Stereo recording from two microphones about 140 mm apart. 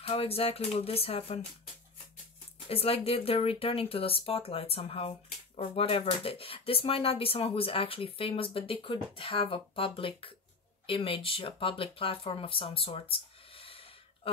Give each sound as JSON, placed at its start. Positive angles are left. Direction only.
{"t": 0.0, "sound": "speech", "side_deg": 45}
{"t": 2.7, "sound": "speech", "side_deg": 45}